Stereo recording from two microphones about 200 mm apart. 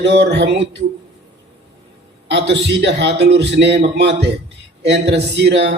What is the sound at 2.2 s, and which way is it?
Speech, 60° right (ahead or behind).